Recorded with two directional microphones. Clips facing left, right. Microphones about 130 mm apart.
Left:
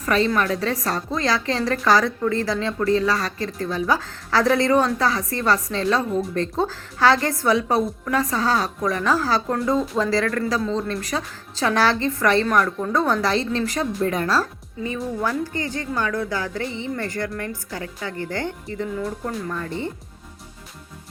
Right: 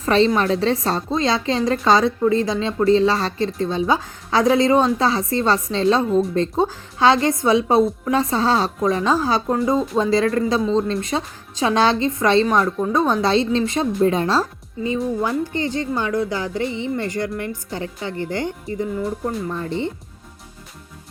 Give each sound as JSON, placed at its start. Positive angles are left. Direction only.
{"t": 0.0, "sound": "a woman's voice", "side_deg": -25}